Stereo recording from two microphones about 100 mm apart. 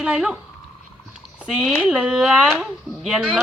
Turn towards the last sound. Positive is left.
turn(degrees=-5)  # may be behind; listen again after turning